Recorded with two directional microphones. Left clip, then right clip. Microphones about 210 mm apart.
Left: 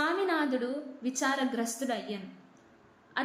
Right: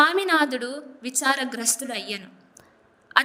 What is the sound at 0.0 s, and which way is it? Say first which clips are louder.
A woman's voice: right 10 dB; 50° right (ahead or behind).